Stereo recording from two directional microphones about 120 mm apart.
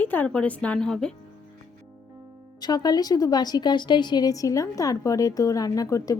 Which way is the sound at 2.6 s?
35° left (ahead or behind).